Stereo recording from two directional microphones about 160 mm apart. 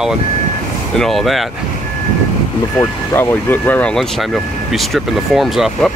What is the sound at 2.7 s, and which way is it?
Speech, 15° left (ahead or behind).